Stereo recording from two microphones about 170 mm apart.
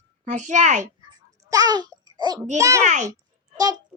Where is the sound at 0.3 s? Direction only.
45° right (ahead or behind).